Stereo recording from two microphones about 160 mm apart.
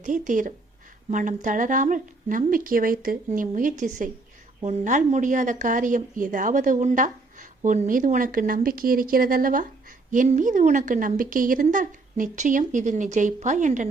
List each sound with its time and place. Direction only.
0.0 s a woman's voice: 55° right (ahead or behind)